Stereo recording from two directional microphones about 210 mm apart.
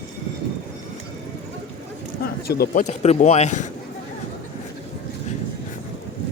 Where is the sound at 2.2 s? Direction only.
45° left (ahead or behind).